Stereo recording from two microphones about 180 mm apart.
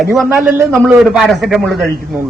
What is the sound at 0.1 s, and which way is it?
A man's voice, centre (ahead or behind).